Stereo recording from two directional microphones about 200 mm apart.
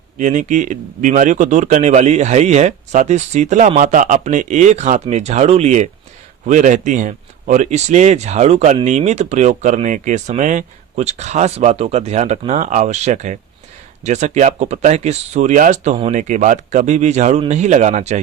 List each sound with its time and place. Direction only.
0.2 s speech: 35° right (ahead or behind)